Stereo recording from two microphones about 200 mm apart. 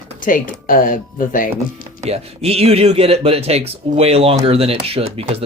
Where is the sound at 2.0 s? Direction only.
30° right (ahead or behind).